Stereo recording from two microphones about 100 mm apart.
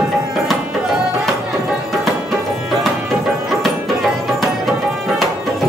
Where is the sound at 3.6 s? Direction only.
Centre (ahead or behind).